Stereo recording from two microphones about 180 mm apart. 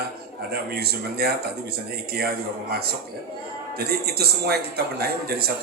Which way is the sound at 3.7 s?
60° right (ahead or behind).